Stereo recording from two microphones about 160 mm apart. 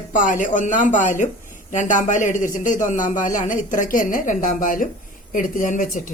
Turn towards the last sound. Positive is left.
turn(degrees=55)  # may be behind; listen again after turning